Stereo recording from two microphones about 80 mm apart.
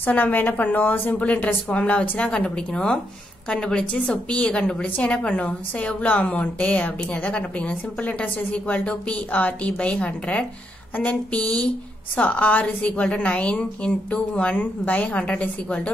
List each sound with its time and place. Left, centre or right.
0.0 s a woman's voice: left